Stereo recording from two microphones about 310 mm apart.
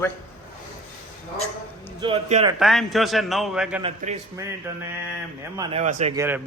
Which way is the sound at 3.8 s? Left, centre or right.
Centre.